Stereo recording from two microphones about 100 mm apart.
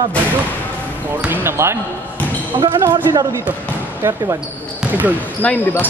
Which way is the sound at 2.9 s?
35° right (ahead or behind).